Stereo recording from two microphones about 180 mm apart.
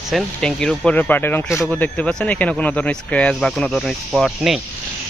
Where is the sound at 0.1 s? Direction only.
5° left (ahead or behind).